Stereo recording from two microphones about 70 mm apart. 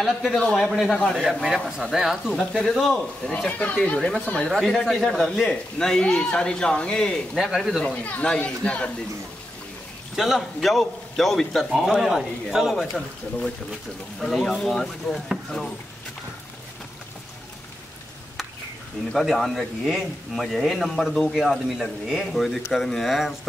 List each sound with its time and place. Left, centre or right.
0.0 s a man's voice: centre
0.4 s a man's voice: centre
0.7 s a man's voice: centre
2.3 s a man's voice: centre
3.3 s a man's voice: centre
4.5 s a man's voice: centre
7.4 s a man's voice: centre
7.8 s a man's voice: centre
10.1 s a man's voice: centre
11.7 s a man's voice: centre
14.2 s a man's voice: centre
19.1 s a man's voice: centre